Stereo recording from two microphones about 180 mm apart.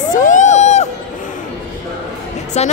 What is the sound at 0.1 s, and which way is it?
Crowd, 45° left (ahead or behind).